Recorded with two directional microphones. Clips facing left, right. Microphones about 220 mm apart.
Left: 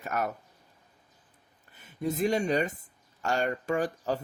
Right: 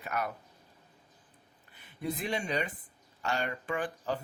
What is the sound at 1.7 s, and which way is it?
Speech, 45° left (ahead or behind).